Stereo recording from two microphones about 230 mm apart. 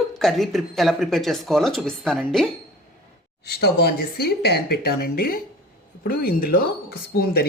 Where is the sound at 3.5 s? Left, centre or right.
Left.